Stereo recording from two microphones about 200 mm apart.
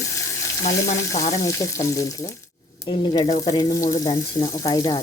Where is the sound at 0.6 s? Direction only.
35° left (ahead or behind).